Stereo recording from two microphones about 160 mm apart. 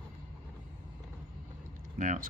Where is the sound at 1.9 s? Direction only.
55° right (ahead or behind).